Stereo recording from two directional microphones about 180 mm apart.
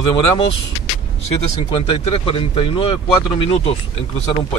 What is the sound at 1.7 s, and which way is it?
Speech, 30° left (ahead or behind).